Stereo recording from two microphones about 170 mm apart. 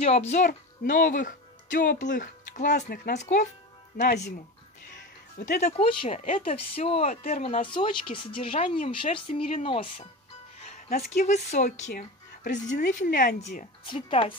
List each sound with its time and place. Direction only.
0.0 s speech: 40° left (ahead or behind)
5.4 s speech: 45° left (ahead or behind)
7.6 s speech: 30° left (ahead or behind)
11.1 s speech: 45° left (ahead or behind)
13.8 s speech: 30° left (ahead or behind)